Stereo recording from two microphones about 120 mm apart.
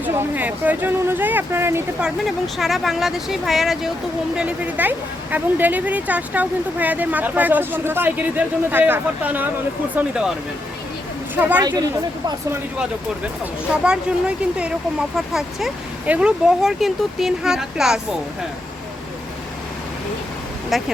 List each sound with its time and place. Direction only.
0.0 s speech: 15° right (ahead or behind)
2.0 s speech: 5° right (ahead or behind)
11.3 s speech: 15° right (ahead or behind)
11.6 s speech: 35° right (ahead or behind)
13.4 s speech: 10° right (ahead or behind)
20.7 s speech: centre (ahead or behind)